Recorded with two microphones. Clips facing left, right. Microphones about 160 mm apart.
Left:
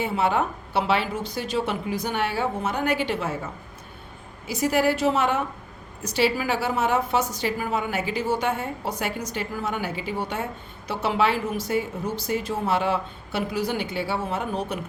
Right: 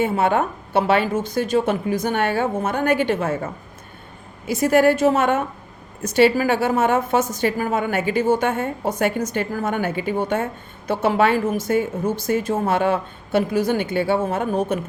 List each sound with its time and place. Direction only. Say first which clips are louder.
0.0 s a woman's voice: right 4 dB; 50° right (ahead or behind)